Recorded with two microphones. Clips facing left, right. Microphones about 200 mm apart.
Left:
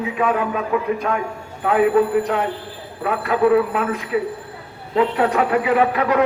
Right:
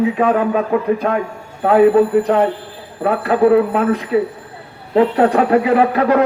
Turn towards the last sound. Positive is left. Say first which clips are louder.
# right 4 dB
turn(degrees=-35)  # may be behind; listen again after turning